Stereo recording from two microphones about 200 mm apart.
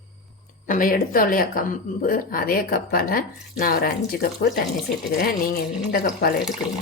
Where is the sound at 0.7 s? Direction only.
45° left (ahead or behind).